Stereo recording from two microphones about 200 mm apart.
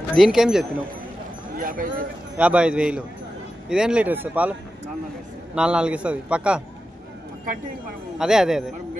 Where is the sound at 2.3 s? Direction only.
5° right (ahead or behind).